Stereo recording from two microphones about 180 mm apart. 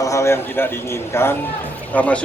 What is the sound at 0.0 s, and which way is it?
A man's voice, 15° left (ahead or behind).